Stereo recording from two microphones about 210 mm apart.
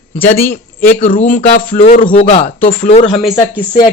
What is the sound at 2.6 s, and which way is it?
Speech, 35° left (ahead or behind).